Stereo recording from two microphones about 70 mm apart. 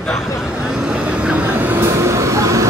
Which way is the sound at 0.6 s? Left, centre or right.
Centre.